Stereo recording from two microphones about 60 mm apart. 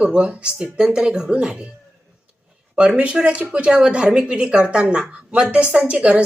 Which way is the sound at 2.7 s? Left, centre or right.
Centre.